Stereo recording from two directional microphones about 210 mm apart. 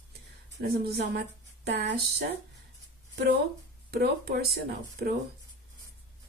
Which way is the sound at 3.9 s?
45° right (ahead or behind).